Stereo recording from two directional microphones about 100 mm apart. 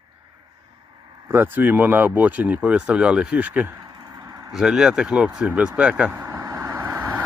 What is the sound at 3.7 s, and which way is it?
Vehicle, 40° right (ahead or behind).